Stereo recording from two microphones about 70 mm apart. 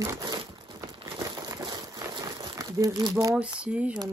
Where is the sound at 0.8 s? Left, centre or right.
Right.